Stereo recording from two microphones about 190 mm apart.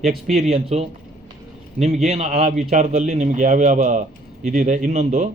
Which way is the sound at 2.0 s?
35° right (ahead or behind).